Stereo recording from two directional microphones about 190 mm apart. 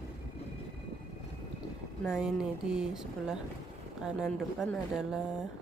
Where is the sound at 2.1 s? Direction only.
5° right (ahead or behind).